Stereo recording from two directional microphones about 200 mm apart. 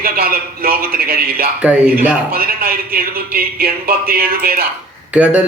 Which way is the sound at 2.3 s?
50° right (ahead or behind).